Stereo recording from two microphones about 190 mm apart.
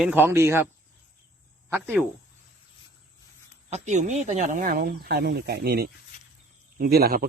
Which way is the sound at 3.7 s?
40° right (ahead or behind).